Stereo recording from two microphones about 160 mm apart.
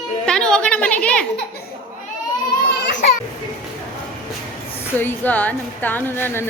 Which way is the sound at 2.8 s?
90° left.